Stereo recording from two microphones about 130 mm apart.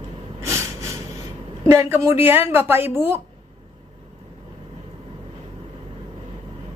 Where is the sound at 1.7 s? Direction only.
25° right (ahead or behind).